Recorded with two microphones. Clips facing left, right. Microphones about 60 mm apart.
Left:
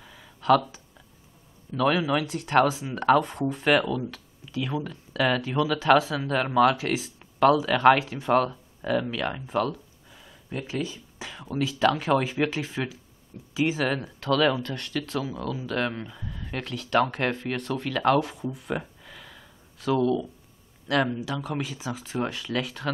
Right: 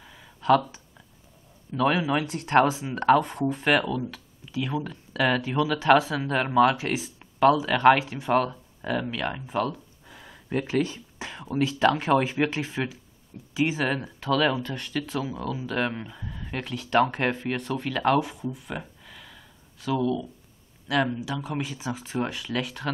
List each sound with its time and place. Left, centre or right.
0.0 s a sound: centre
1.8 s speech: centre
2.2 s speech: right
2.8 s speech: centre
10.0 s a sound: right
11.1 s whispering: centre
12.0 s speech: centre
18.4 s a sound: centre
20.9 s speech: centre